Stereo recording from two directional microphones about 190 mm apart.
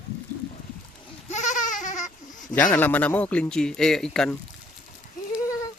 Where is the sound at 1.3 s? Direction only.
40° left (ahead or behind).